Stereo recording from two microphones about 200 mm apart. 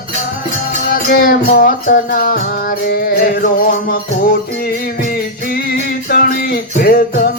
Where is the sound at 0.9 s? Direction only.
45° left (ahead or behind).